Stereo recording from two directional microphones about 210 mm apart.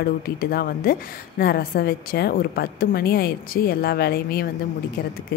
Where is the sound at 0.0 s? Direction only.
45° left (ahead or behind).